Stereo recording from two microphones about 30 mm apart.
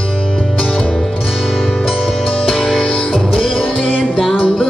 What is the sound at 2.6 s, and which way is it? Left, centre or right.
Music, left.